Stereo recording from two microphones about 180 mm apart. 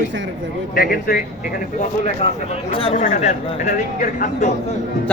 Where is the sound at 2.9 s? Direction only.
45° left (ahead or behind).